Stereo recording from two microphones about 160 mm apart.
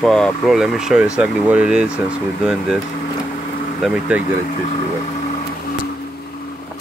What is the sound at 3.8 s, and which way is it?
Speech, 10° right (ahead or behind).